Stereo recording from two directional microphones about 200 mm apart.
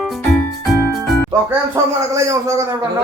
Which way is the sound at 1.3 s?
15° right (ahead or behind).